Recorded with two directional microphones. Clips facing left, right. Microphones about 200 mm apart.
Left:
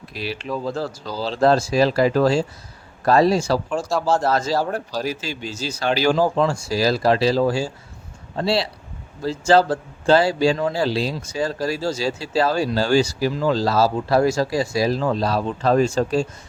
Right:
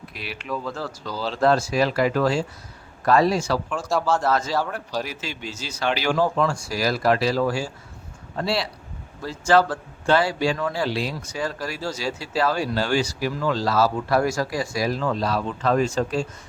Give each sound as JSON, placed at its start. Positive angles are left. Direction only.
{"t": 0.1, "sound": "speech", "side_deg": 35}